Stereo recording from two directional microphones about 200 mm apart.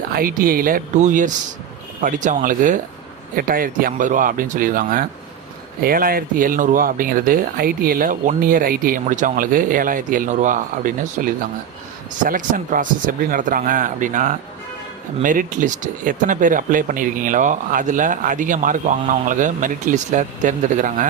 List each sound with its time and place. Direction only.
0.1 s speech: 45° right (ahead or behind)